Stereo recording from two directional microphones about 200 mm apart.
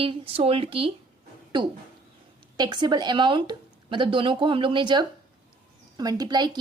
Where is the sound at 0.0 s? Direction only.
30° right (ahead or behind).